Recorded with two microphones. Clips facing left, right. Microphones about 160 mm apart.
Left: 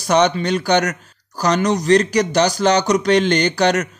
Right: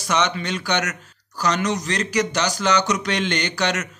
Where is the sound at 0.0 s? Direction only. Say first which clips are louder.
Left 7 dB; 35° left (ahead or behind).